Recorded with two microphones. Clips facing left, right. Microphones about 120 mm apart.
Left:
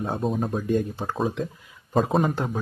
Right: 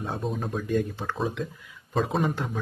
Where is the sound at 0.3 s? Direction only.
40° left (ahead or behind).